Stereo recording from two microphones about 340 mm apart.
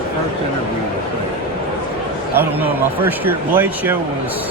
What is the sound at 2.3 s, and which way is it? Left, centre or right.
Speech, centre.